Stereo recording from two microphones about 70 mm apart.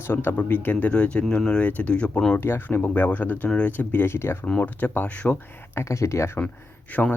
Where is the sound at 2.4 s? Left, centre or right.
Left.